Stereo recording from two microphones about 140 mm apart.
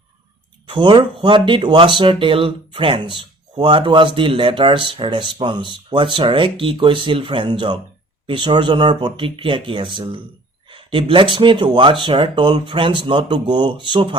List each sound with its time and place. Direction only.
0.7 s speech: 35° right (ahead or behind)